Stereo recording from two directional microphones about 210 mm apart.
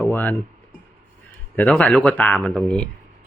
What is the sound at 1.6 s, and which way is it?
Speech, 5° left (ahead or behind).